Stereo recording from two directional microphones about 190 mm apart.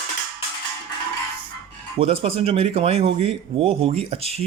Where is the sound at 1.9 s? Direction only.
30° right (ahead or behind).